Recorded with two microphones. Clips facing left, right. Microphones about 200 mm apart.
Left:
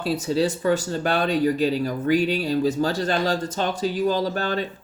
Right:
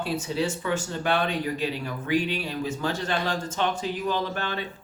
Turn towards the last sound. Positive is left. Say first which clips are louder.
# left 5 dB
turn(degrees=40)  # may be behind; listen again after turning